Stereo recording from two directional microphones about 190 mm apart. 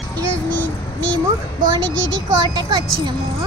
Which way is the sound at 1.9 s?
80° right.